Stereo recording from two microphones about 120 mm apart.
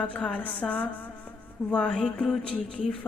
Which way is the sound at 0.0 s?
10° left (ahead or behind).